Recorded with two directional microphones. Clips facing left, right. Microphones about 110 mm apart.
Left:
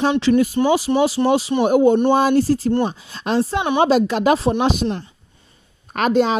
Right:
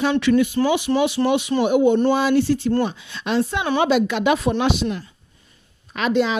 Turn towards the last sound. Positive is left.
turn(degrees=45)  # may be behind; listen again after turning